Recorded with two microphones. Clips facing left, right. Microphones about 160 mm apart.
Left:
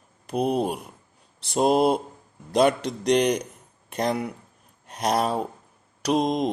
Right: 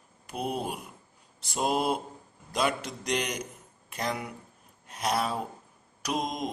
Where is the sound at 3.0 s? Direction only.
35° left (ahead or behind).